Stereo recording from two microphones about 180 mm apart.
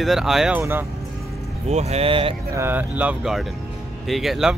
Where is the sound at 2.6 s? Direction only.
10° right (ahead or behind).